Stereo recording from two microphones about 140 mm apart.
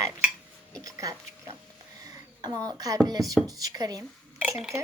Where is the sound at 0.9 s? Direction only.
25° right (ahead or behind).